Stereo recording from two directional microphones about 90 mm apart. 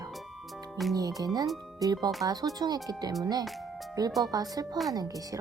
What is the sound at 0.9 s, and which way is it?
Speech, 45° right (ahead or behind).